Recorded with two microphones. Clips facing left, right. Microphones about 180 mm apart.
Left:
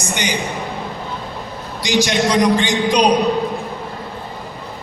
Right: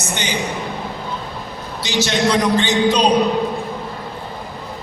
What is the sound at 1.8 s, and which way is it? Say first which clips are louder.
A man's voice: left 2 dB; 15° left (ahead or behind).